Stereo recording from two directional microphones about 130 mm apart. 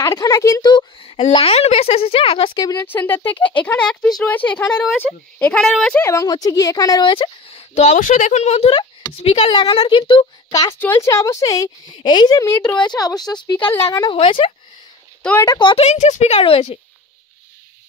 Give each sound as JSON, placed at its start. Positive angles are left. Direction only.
{"t": 0.1, "sound": "a woman's voice", "side_deg": 25}
{"t": 0.7, "sound": "a woman's voice", "side_deg": 40}
{"t": 2.6, "sound": "a woman's voice", "side_deg": 25}
{"t": 2.9, "sound": "speech", "side_deg": 15}
{"t": 6.0, "sound": "a woman's voice", "side_deg": 25}
{"t": 10.5, "sound": "a woman's voice", "side_deg": 25}
{"t": 13.7, "sound": "a woman's voice", "side_deg": 20}
{"t": 14.1, "sound": "a woman's voice", "side_deg": 45}
{"t": 15.4, "sound": "speech", "side_deg": 30}
{"t": 15.7, "sound": "speech", "side_deg": 55}